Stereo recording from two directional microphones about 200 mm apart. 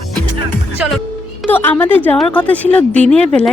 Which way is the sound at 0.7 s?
5° right (ahead or behind).